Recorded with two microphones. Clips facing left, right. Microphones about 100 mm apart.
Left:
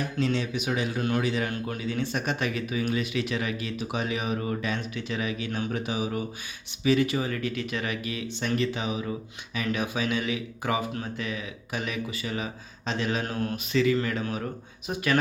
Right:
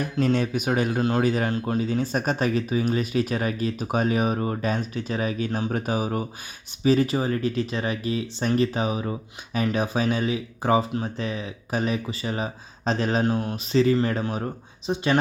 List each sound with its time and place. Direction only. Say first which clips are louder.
0.0 s speech: right 4 dB; 45° right (ahead or behind)
1.5 s speech: right 6 dB; 30° right (ahead or behind)
5.7 s speech: right 3 dB; 45° right (ahead or behind)
13.2 s speech: right 5 dB; 25° right (ahead or behind)
14.8 s speech: right 3 dB; 25° right (ahead or behind)